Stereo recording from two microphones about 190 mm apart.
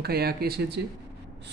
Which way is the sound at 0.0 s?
55° right (ahead or behind).